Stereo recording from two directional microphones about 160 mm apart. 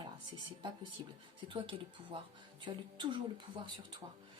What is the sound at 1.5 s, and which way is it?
Speech, 30° right (ahead or behind).